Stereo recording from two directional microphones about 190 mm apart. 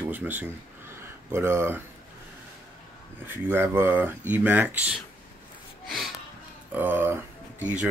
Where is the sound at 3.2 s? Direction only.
10° right (ahead or behind).